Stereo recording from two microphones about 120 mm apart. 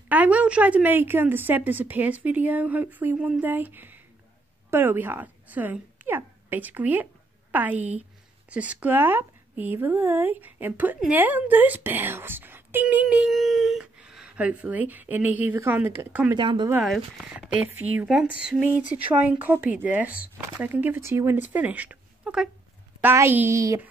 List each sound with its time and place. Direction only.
0.1 s speech: 10° right (ahead or behind)
16.3 s speech: 40° right (ahead or behind)
16.8 s speech: 5° right (ahead or behind)
23.0 s a woman's voice: 20° right (ahead or behind)